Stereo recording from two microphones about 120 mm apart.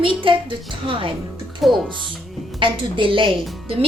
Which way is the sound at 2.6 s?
45° right (ahead or behind).